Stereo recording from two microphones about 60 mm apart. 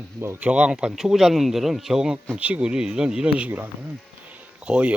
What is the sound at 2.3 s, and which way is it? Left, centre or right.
Speech, right.